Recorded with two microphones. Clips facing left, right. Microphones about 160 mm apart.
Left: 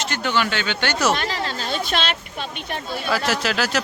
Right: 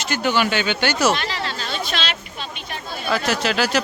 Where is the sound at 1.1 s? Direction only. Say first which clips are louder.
Left 1 dB; 45° left (ahead or behind).